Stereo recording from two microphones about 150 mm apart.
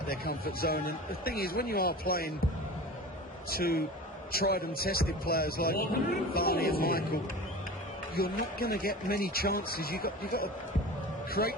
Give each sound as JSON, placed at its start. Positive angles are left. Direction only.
{"t": 0.1, "sound": "speech", "side_deg": 90}
{"t": 3.5, "sound": "a man's voice", "side_deg": 90}
{"t": 8.1, "sound": "a man's voice", "side_deg": 85}